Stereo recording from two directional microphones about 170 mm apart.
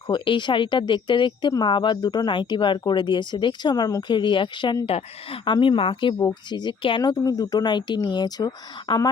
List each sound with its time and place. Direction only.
0.1 s speech: 25° left (ahead or behind)